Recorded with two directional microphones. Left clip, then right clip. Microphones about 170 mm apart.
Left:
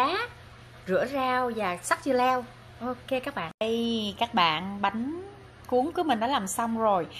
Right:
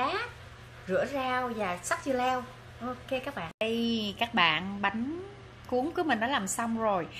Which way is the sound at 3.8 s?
15° right (ahead or behind).